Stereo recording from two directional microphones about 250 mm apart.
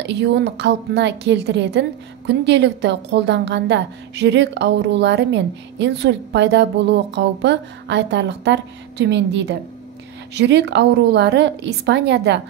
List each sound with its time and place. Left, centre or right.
0.0 s a woman's voice: right